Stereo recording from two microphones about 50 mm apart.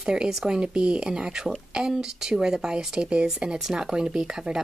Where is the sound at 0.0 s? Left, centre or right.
Centre.